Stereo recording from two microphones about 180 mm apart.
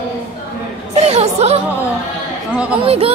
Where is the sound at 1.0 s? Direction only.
35° right (ahead or behind).